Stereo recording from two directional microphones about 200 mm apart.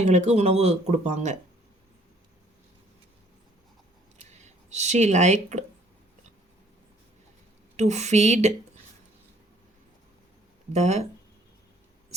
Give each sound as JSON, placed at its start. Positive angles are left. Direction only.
{"t": 0.0, "sound": "speech", "side_deg": -35}
{"t": 4.2, "sound": "speech", "side_deg": -35}
{"t": 7.8, "sound": "speech", "side_deg": -35}
{"t": 10.7, "sound": "speech", "side_deg": -35}